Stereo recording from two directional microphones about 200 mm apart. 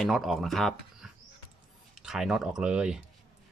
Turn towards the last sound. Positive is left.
turn(degrees=-5)  # may be behind; listen again after turning